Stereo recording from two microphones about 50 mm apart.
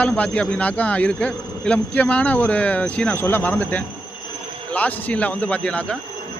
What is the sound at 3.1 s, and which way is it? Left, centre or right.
Speech, left.